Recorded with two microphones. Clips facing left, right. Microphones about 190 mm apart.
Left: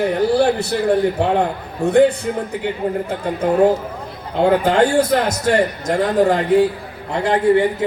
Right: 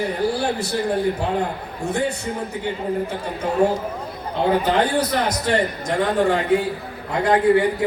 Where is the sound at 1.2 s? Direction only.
65° left (ahead or behind).